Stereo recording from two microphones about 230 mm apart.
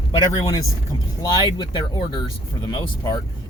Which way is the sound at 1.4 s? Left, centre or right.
Centre.